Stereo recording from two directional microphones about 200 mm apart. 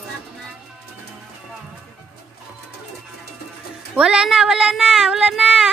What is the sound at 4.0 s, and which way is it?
Speech, 5° right (ahead or behind).